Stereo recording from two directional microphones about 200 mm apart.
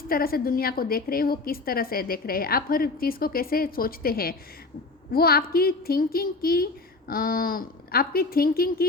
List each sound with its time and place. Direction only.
0.1 s a woman's voice: 50° left (ahead or behind)